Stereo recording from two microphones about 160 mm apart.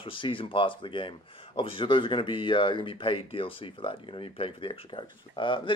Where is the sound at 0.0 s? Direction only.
30° left (ahead or behind).